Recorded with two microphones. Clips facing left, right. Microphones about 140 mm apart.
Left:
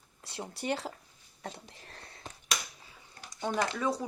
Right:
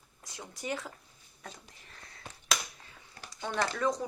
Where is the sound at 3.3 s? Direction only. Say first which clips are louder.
Left 1 dB; 15° left (ahead or behind).